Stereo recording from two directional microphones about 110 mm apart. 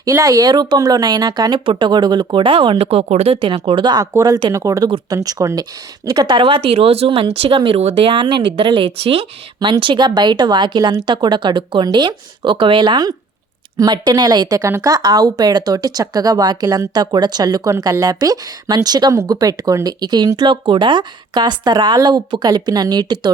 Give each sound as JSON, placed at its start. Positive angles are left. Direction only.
{"t": 0.0, "sound": "a woman's voice", "side_deg": -25}
{"t": 3.4, "sound": "a woman's voice", "side_deg": -50}
{"t": 7.8, "sound": "a woman's voice", "side_deg": -70}